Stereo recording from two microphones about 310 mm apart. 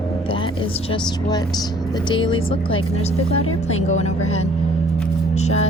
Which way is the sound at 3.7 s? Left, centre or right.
Left.